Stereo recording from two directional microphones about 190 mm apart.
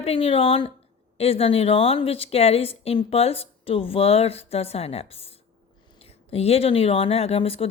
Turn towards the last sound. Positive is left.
turn(degrees=30)  # may be behind; listen again after turning